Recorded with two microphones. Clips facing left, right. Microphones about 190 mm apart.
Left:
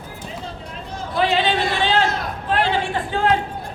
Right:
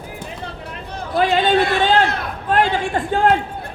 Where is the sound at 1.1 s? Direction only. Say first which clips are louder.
Right 4 dB; 50° right (ahead or behind).